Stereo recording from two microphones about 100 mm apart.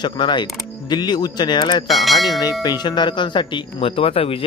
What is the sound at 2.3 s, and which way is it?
A man's voice, 45° left (ahead or behind).